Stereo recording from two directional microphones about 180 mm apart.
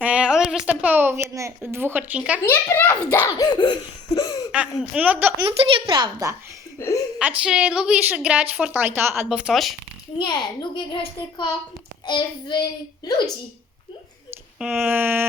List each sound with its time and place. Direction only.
0.0 s a woman's voice: 5° right (ahead or behind)
2.4 s a child's voice: 10° left (ahead or behind)
4.8 s a woman's voice: 5° right (ahead or behind)
5.5 s a woman's voice: 30° right (ahead or behind)
6.7 s a sound: 15° left (ahead or behind)
7.2 s a woman's voice: 5° right (ahead or behind)
10.2 s a child's voice: 25° left (ahead or behind)
14.3 s speech: 10° right (ahead or behind)